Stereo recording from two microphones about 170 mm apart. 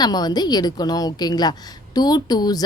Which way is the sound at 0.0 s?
25° left (ahead or behind).